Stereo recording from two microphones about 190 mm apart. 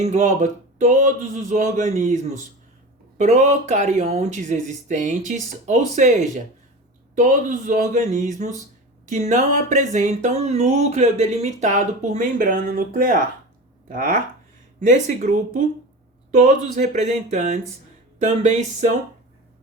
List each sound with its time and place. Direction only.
0.0 s speech: 40° right (ahead or behind)